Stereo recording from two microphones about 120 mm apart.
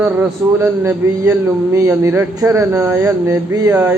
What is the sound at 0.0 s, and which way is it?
A man's voice, 20° right (ahead or behind).